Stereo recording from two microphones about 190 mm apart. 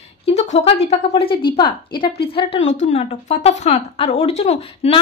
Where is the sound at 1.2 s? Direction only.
25° left (ahead or behind).